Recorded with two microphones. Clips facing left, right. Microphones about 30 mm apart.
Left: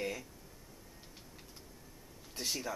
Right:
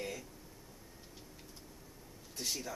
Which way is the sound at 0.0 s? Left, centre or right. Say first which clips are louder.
Left 3 dB; centre.